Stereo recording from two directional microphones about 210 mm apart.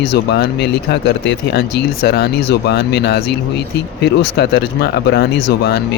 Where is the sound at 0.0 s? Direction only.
55° left (ahead or behind).